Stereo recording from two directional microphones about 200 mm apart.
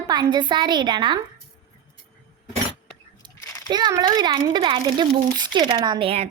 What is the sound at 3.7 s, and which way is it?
A child's voice, 20° right (ahead or behind).